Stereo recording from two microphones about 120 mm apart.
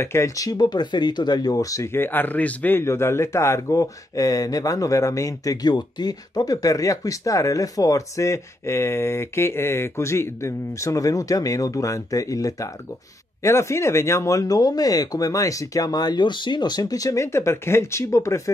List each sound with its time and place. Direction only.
0.0 s speech: 25° left (ahead or behind)